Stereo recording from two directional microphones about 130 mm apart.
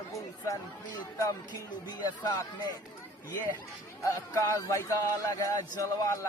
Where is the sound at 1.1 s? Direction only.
30° left (ahead or behind).